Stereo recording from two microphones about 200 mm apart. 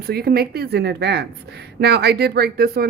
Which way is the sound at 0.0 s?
50° right (ahead or behind).